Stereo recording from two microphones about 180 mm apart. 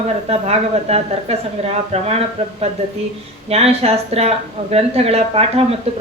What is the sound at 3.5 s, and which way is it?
Speech, 35° right (ahead or behind).